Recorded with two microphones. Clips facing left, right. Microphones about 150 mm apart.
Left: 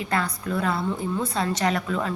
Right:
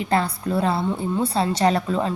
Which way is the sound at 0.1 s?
30° right (ahead or behind).